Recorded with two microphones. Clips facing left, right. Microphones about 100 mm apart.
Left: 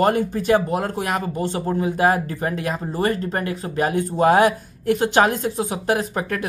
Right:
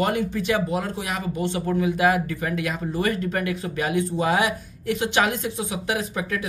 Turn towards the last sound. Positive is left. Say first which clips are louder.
# left 4 dB
turn(degrees=50)  # may be behind; listen again after turning